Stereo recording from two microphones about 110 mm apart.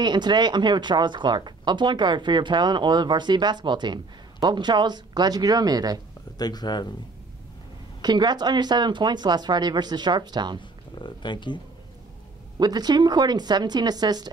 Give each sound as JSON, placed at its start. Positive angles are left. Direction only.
{"t": 0.0, "sound": "speech", "side_deg": -40}
{"t": 6.3, "sound": "speech", "side_deg": 35}
{"t": 8.0, "sound": "speech", "side_deg": -40}
{"t": 11.0, "sound": "speech", "side_deg": 45}
{"t": 12.5, "sound": "speech", "side_deg": -40}